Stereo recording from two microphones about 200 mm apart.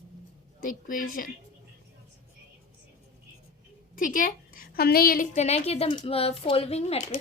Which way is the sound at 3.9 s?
45° left (ahead or behind).